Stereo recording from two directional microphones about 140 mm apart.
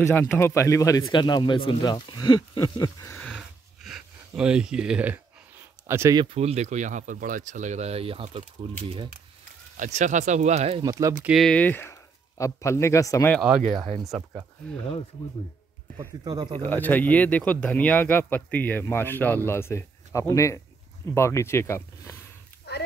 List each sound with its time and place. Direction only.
0.0 s a man's voice: 15° left (ahead or behind)
1.0 s speech: 35° left (ahead or behind)
3.2 s wheeze: 10° left (ahead or behind)
3.8 s speech: 5° right (ahead or behind)
6.3 s speech: 50° right (ahead or behind)
9.8 s speech: 60° right (ahead or behind)
10.8 s speech: 25° right (ahead or behind)
11.2 s speech: centre (ahead or behind); by 13.3 s 20° left (ahead or behind)
14.0 s speech: centre (ahead or behind)
16.3 s speech: 30° right (ahead or behind)
16.5 s speech: 15° left (ahead or behind)